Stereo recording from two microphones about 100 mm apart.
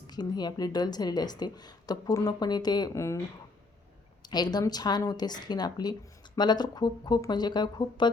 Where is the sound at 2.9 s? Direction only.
30° left (ahead or behind).